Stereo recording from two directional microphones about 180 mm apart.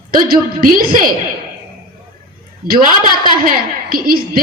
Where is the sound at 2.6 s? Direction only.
55° right (ahead or behind).